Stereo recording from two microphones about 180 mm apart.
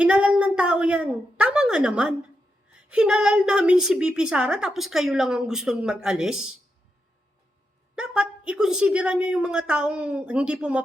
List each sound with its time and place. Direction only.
0.0 s a sound: 5° right (ahead or behind)
2.9 s a woman's voice: 5° right (ahead or behind)
7.9 s a woman's voice: 5° right (ahead or behind)